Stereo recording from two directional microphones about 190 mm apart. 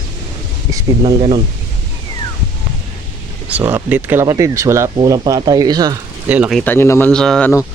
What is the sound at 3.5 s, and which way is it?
Speech, 10° right (ahead or behind).